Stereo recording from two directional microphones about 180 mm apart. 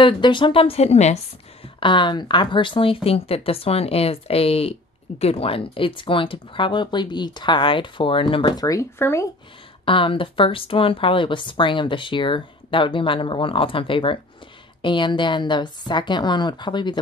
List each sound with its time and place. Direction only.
0.0 s speech: 25° left (ahead or behind)
1.8 s speech: 25° left (ahead or behind)
9.8 s speech: 30° left (ahead or behind)